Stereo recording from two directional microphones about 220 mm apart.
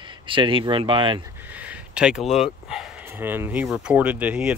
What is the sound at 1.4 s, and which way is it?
Speech, 5° right (ahead or behind).